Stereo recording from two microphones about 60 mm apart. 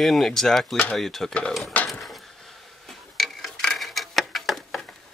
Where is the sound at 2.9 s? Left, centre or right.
Centre.